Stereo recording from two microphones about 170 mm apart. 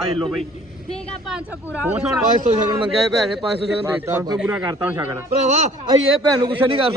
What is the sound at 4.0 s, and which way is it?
A man's voice, 15° right (ahead or behind).